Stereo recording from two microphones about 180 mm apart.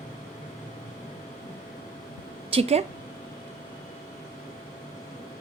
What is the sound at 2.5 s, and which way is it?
Speech, 35° right (ahead or behind).